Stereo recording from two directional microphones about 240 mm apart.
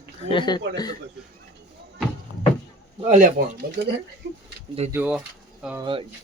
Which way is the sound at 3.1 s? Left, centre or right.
Right.